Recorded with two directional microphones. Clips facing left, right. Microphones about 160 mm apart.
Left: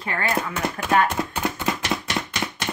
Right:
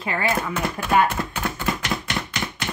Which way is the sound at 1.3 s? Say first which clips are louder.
Left 1 dB; 20° left (ahead or behind).